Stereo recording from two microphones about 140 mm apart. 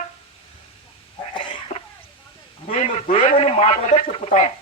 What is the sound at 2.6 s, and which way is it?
Speech, 50° left (ahead or behind).